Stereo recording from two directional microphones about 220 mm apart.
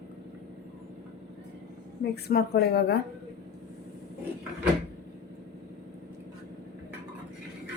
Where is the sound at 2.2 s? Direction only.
45° left (ahead or behind).